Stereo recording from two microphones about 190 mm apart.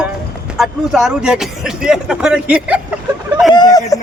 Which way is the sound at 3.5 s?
20° left (ahead or behind).